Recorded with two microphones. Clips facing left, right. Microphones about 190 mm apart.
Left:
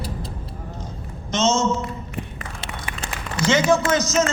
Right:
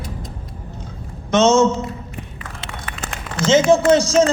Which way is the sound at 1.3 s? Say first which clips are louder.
Right 7 dB; 60° right (ahead or behind).